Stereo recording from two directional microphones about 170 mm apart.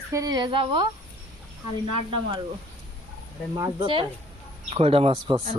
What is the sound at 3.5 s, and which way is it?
A woman's voice, 25° right (ahead or behind).